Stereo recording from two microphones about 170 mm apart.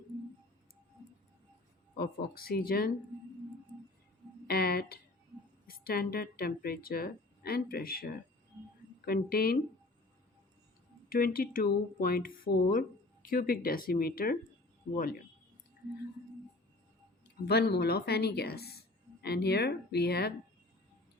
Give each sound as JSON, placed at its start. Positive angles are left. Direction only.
{"t": 2.0, "sound": "speech", "side_deg": 60}
{"t": 4.4, "sound": "music", "side_deg": 65}
{"t": 5.6, "sound": "speech", "side_deg": 60}
{"t": 11.1, "sound": "speech", "side_deg": 60}
{"t": 17.4, "sound": "a woman's voice", "side_deg": 70}